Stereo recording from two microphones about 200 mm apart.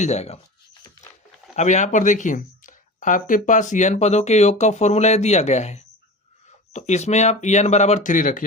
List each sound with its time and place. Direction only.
0.0 s speech: 35° left (ahead or behind)
1.5 s speech: 35° left (ahead or behind)